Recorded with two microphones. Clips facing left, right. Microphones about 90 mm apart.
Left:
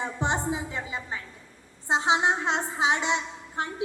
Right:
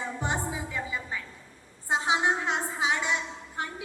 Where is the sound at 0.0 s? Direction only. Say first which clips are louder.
Left 3 dB; 20° left (ahead or behind).